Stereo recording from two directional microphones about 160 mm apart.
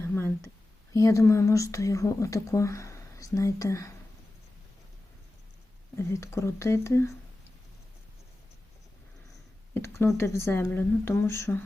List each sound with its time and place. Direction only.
0.1 s a sound: 15° left (ahead or behind)
0.9 s speech: 20° left (ahead or behind)
6.0 s speech: 15° left (ahead or behind)
9.7 s speech: 15° left (ahead or behind)